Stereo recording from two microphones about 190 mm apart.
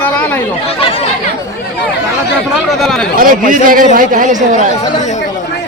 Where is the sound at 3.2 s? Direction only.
45° right (ahead or behind).